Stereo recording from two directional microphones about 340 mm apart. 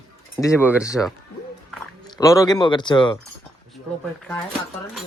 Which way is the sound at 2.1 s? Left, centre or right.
Centre.